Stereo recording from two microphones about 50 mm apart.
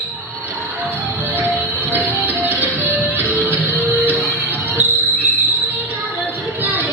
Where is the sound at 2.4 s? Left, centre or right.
Right.